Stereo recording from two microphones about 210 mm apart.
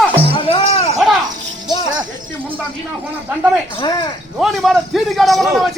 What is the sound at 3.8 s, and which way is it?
Speech, 20° left (ahead or behind).